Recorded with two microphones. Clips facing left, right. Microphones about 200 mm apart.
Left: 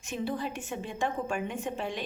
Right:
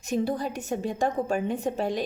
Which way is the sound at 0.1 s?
40° right (ahead or behind).